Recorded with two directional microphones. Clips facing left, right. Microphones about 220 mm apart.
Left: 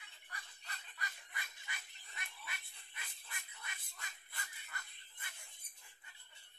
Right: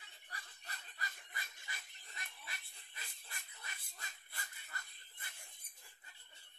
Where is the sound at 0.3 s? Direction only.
35° right (ahead or behind).